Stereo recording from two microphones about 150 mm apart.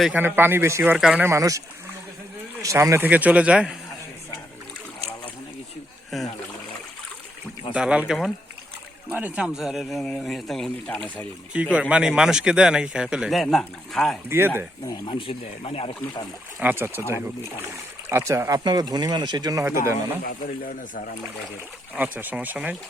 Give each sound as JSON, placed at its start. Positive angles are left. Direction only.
{"t": 0.0, "sound": "a man's voice", "side_deg": -10}
{"t": 1.3, "sound": "a man's voice", "side_deg": -20}
{"t": 6.1, "sound": "speech", "side_deg": 0}
{"t": 7.7, "sound": "speech", "side_deg": -5}
{"t": 11.5, "sound": "speech", "side_deg": -10}
{"t": 14.3, "sound": "a man's voice", "side_deg": -15}
{"t": 14.8, "sound": "speech", "side_deg": 30}
{"t": 16.6, "sound": "a man's voice", "side_deg": -15}
{"t": 18.1, "sound": "speech", "side_deg": -15}
{"t": 21.9, "sound": "a man's voice", "side_deg": -10}